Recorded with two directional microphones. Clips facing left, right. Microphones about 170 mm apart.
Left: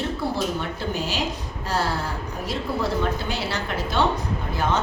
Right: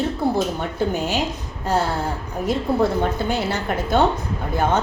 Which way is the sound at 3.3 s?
50° right (ahead or behind).